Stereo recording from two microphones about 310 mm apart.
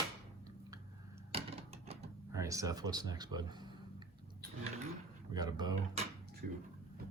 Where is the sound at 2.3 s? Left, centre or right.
Centre.